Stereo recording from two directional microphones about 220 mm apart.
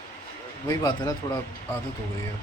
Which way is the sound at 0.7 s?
15° left (ahead or behind).